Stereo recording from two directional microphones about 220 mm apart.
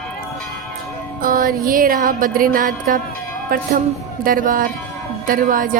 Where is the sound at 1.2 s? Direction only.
40° right (ahead or behind).